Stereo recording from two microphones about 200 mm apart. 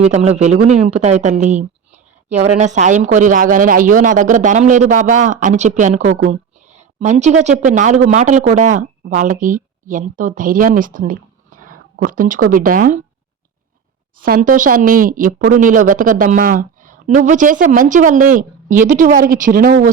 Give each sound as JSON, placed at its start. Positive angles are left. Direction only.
{"t": 0.0, "sound": "a woman's voice", "side_deg": -30}
{"t": 14.2, "sound": "a woman's voice", "side_deg": -45}